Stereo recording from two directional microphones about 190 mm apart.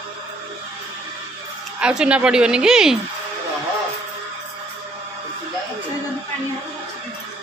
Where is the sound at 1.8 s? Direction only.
5° right (ahead or behind).